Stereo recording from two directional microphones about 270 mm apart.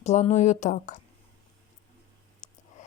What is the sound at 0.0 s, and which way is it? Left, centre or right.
Speech, left.